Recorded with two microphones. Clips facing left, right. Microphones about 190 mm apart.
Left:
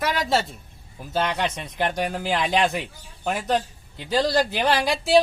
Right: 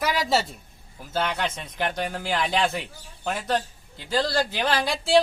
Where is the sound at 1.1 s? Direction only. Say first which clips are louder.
Left 2 dB; 15° left (ahead or behind).